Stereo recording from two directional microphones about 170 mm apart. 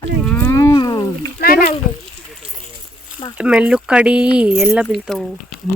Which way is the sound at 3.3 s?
5° right (ahead or behind).